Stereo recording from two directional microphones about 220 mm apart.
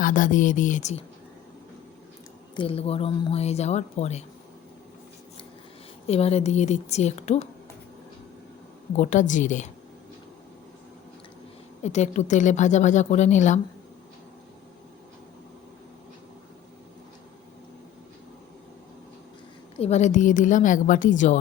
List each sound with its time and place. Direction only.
0.0 s a woman's voice: 35° left (ahead or behind)
2.6 s speech: 25° left (ahead or behind)
6.1 s speech: 30° left (ahead or behind)
9.0 s a woman's voice: 35° left (ahead or behind)
11.8 s a woman's voice: 30° left (ahead or behind)
19.8 s a woman's voice: 30° left (ahead or behind)